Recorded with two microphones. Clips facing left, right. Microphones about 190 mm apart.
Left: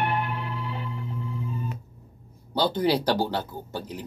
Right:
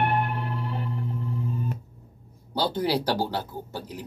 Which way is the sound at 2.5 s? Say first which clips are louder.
Left 2 dB; 10° right (ahead or behind).